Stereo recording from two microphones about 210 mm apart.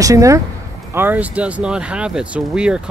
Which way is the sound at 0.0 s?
15° right (ahead or behind).